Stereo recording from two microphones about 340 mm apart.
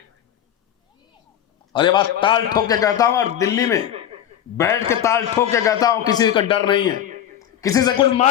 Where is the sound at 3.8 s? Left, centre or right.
Centre.